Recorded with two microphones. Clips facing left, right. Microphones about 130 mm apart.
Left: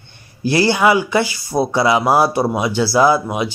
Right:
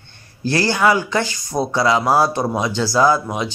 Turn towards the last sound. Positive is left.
turn(degrees=10)  # may be behind; listen again after turning